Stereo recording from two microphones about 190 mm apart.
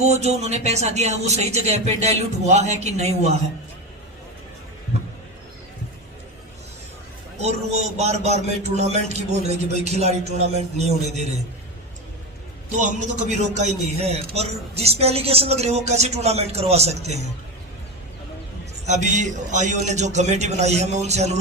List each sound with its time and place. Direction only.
0.1 s a man's voice: 35° right (ahead or behind)
7.4 s a man's voice: 35° right (ahead or behind)
12.8 s a man's voice: 35° right (ahead or behind)
18.9 s a man's voice: 40° right (ahead or behind)